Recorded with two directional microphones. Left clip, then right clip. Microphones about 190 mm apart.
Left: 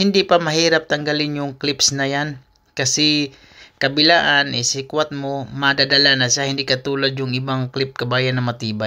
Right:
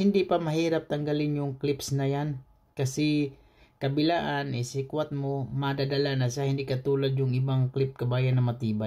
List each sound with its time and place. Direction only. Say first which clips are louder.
0.0 s speech: left 10 dB; 10° left (ahead or behind)